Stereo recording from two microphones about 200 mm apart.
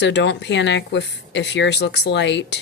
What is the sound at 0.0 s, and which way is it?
Speech, 60° left (ahead or behind).